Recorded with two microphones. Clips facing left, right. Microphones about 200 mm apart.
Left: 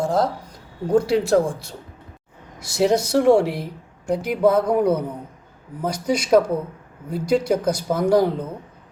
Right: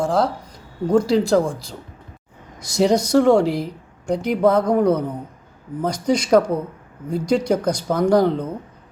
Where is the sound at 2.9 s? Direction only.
5° left (ahead or behind).